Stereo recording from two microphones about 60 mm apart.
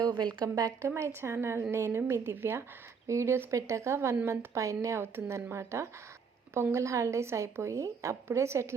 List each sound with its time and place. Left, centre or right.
0.4 s a woman's voice: right
0.9 s a woman's voice: right
3.1 s a woman's voice: right
5.1 s a woman's voice: right